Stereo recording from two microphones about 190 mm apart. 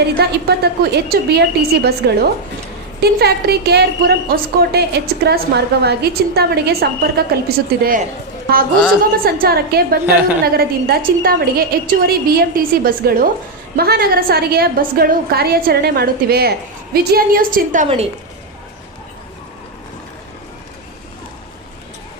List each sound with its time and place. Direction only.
0.2 s a woman's voice: 60° right (ahead or behind)
9.2 s a woman's voice: 50° right (ahead or behind)
17.8 s a woman's voice: 30° right (ahead or behind)